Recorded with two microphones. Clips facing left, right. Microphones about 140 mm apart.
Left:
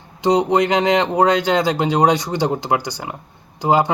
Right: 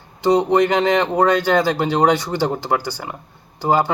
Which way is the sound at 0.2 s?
15° left (ahead or behind).